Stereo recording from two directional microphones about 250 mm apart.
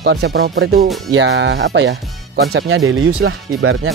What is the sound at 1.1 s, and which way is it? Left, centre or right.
Speech, right.